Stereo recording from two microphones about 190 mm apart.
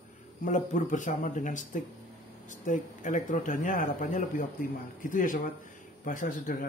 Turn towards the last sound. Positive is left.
turn(degrees=45)  # may be behind; listen again after turning